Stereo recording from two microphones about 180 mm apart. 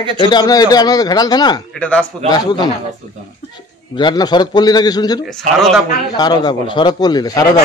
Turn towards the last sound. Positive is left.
turn(degrees=20)  # may be behind; listen again after turning